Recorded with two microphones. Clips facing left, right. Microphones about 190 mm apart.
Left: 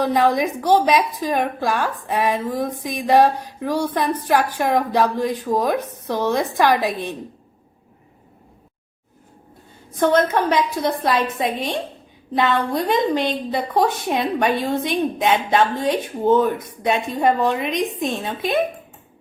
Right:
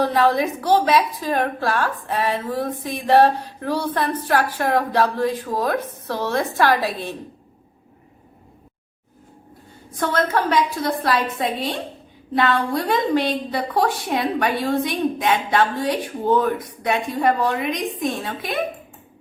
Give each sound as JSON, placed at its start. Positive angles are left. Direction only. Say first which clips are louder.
{"t": 0.0, "sound": "a woman's voice", "louder": "even", "side_deg": 15}
{"t": 10.0, "sound": "a woman's voice", "louder": "left 4 dB", "side_deg": 20}